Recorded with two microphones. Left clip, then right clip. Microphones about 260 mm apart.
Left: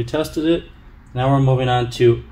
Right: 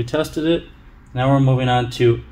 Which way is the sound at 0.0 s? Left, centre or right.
Right.